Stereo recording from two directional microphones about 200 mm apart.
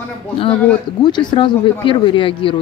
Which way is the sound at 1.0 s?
20° left (ahead or behind).